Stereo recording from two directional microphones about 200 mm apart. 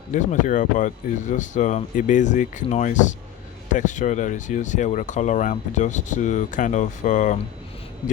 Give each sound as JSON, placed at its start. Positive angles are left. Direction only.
{"t": 0.1, "sound": "speech", "side_deg": 40}